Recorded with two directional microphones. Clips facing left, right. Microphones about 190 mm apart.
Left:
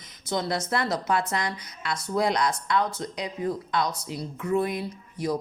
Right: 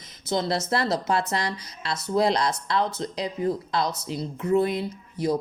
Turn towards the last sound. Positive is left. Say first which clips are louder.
# right 3 dB
turn(degrees=-30)  # may be behind; listen again after turning